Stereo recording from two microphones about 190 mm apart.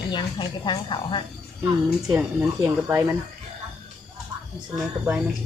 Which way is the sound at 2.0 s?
15° right (ahead or behind).